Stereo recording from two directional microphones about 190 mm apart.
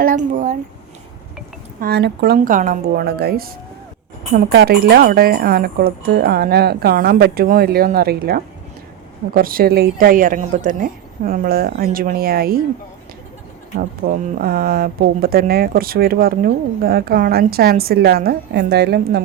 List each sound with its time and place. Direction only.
0.0 s speech: 45° right (ahead or behind)
1.8 s speech: 60° right (ahead or behind)
14.0 s speech: 45° right (ahead or behind)